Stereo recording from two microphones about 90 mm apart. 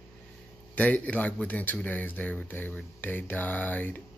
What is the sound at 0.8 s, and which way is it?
Speech, 15° left (ahead or behind).